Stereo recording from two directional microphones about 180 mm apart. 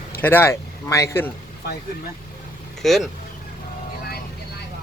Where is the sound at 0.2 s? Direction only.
10° left (ahead or behind).